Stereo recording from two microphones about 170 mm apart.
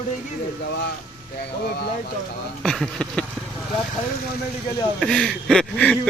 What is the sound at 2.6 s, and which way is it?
Speech, centre (ahead or behind).